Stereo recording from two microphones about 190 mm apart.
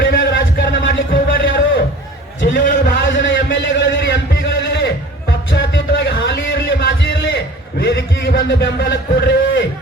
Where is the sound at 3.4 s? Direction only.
70° left (ahead or behind).